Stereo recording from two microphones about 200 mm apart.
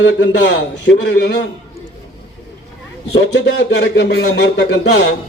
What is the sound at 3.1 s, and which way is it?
Speech, 65° left (ahead or behind).